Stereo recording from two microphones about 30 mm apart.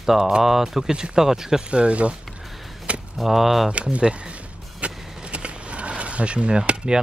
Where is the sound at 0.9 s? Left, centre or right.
Right.